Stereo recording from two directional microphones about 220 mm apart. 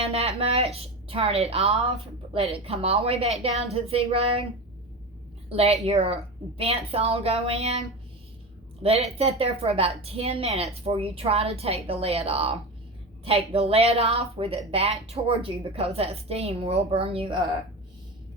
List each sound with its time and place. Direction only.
0.0 s a woman's voice: 30° right (ahead or behind)
5.5 s a woman's voice: 30° right (ahead or behind)